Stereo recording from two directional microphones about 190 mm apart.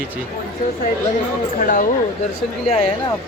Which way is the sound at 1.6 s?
45° left (ahead or behind).